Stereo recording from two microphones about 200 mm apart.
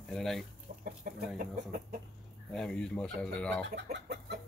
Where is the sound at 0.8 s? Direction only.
50° right (ahead or behind).